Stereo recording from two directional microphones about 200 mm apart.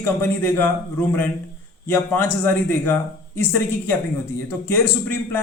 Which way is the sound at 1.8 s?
10° left (ahead or behind).